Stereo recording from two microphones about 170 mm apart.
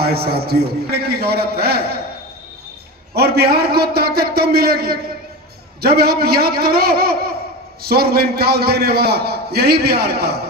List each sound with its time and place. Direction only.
0.0 s a man's voice: 65° right (ahead or behind)
3.2 s a man's voice: 65° right (ahead or behind)